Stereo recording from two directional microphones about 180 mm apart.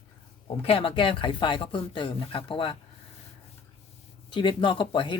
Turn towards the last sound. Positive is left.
turn(degrees=25)  # may be behind; listen again after turning